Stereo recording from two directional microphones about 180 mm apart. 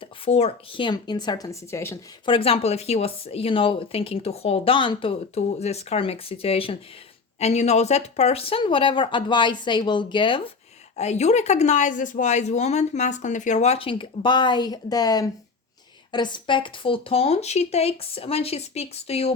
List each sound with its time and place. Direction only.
0.3 s speech: 35° left (ahead or behind); by 2.0 s 15° left (ahead or behind)
2.2 s speech: 30° left (ahead or behind)
10.9 s speech: 40° left (ahead or behind)